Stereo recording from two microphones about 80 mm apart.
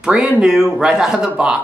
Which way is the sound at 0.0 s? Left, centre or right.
Centre.